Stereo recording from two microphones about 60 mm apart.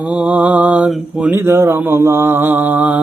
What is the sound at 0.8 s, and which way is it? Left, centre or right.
Mantra, centre.